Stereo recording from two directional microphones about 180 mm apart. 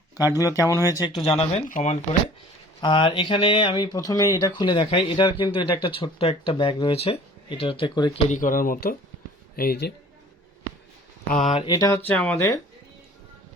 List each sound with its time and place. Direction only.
0.3 s speech: 20° left (ahead or behind); by 2.0 s 40° left (ahead or behind)
2.8 s speech: 30° left (ahead or behind)
8.3 s speech: 50° left (ahead or behind)
11.3 s speech: 35° left (ahead or behind)
11.6 s speech: 20° left (ahead or behind)
12.0 s speech: 10° left (ahead or behind)